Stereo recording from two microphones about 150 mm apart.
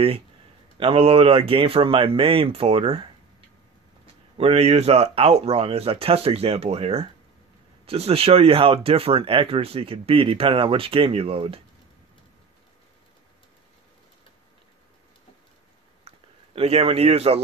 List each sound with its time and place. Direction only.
0.7 s speech: 40° right (ahead or behind)
16.5 s speech: 40° right (ahead or behind)